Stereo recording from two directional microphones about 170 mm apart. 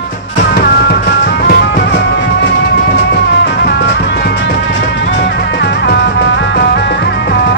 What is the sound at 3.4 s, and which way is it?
Music, 70° left (ahead or behind).